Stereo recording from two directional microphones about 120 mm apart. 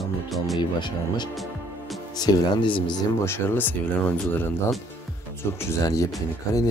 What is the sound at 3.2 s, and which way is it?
Speech, 20° left (ahead or behind).